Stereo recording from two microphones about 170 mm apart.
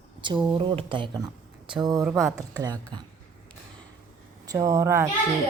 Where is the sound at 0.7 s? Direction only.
30° right (ahead or behind).